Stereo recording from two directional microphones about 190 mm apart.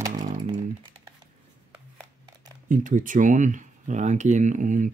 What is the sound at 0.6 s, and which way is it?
Computer keyboard, 30° right (ahead or behind).